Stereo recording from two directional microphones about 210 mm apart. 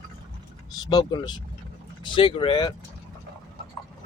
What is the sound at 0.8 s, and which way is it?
Speech, 20° left (ahead or behind).